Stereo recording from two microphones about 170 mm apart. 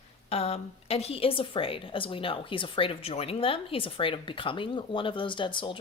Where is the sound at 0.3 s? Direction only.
35° left (ahead or behind).